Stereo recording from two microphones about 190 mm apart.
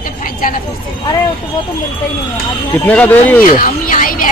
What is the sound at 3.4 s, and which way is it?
Speech, 45° left (ahead or behind).